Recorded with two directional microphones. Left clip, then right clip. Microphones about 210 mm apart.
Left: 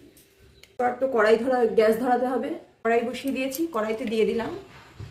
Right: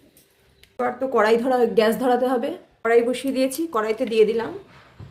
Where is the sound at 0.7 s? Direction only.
50° right (ahead or behind).